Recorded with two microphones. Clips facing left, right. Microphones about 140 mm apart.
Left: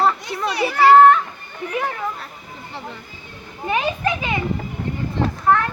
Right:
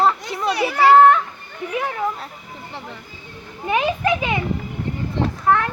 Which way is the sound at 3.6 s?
15° right (ahead or behind).